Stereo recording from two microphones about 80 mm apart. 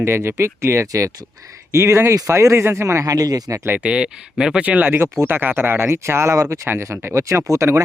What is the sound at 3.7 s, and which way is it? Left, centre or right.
Speech, centre.